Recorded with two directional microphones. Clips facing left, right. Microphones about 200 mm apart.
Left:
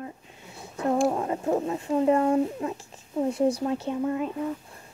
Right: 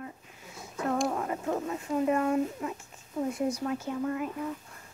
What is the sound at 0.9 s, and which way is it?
A woman's voice, 30° left (ahead or behind).